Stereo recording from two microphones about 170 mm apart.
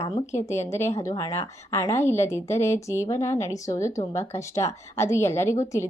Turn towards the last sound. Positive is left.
turn(degrees=15)  # may be behind; listen again after turning